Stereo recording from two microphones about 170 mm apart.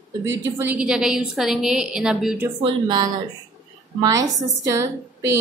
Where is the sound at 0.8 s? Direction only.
5° right (ahead or behind).